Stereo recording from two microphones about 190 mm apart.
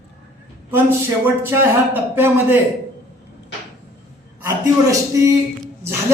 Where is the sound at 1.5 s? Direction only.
10° right (ahead or behind).